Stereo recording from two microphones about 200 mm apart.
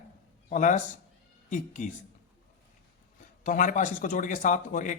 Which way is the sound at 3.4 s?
40° left (ahead or behind).